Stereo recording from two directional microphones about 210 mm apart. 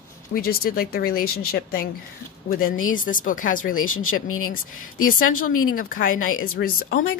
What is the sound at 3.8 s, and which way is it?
Speech, 80° left.